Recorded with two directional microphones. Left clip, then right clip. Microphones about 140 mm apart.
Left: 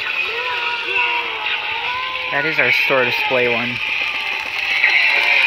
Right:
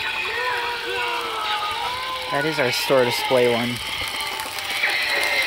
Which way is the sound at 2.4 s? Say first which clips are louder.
Left 7 dB; 25° right (ahead or behind).